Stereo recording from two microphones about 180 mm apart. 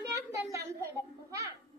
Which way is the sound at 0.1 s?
15° right (ahead or behind).